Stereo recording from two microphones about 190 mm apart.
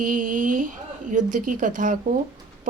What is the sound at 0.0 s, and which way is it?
A woman's voice, 45° right (ahead or behind).